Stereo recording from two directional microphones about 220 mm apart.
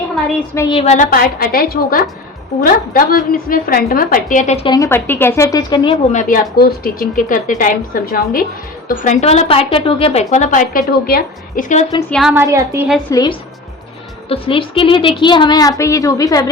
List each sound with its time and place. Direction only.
0.3 s a woman's voice: 10° left (ahead or behind)
0.8 s a woman's voice: 35° left (ahead or behind)
12.3 s a woman's voice: 15° right (ahead or behind)
13.1 s a woman's voice: 15° left (ahead or behind)